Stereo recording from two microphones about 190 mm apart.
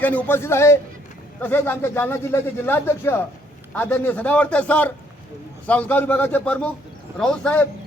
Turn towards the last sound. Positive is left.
turn(degrees=5)  # may be behind; listen again after turning